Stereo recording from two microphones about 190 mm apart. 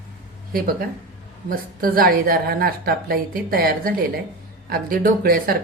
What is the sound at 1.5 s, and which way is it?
A woman's voice, 50° right (ahead or behind).